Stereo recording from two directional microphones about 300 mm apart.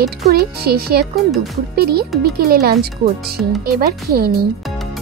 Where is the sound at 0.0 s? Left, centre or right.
Right.